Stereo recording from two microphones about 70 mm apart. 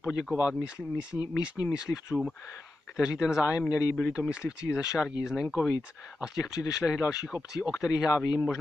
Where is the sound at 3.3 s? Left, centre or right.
Left.